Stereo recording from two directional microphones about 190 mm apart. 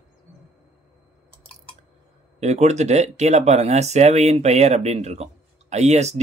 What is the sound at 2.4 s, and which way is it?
Speech, 35° right (ahead or behind).